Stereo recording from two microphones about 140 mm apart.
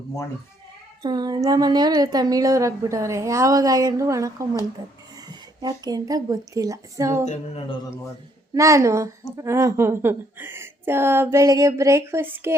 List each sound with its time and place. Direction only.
1.0 s a woman's voice: 30° right (ahead or behind)
5.6 s a woman's voice: 30° right (ahead or behind)
8.5 s a woman's voice: 20° right (ahead or behind)